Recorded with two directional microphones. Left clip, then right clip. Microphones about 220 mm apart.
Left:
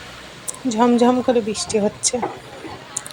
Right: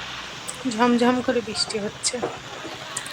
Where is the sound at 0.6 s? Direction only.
15° left (ahead or behind).